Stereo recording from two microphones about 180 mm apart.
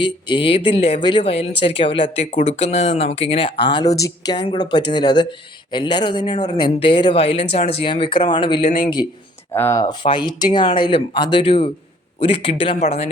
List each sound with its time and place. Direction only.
0.0 s speech: 25° left (ahead or behind)
9.5 s speech: 15° left (ahead or behind)
9.8 s speech: 25° left (ahead or behind)